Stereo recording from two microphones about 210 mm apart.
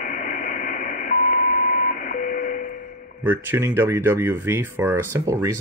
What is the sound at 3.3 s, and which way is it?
Speech, 10° right (ahead or behind).